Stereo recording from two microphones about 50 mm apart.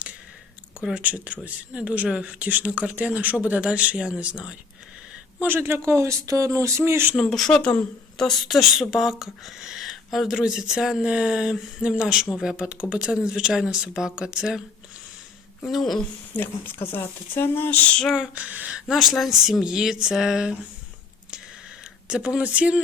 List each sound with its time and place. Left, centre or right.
0.9 s speech: right
5.5 s speech: right
5.8 s speech: right
7.3 s speech: centre
10.2 s speech: centre
15.6 s speech: centre
16.3 s speech: left
18.3 s speech: right
18.9 s speech: centre
22.0 s speech: centre